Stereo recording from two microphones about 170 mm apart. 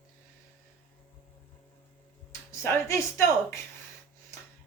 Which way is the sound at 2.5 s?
15° left (ahead or behind).